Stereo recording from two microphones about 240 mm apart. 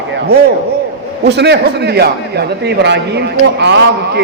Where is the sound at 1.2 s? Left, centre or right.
Right.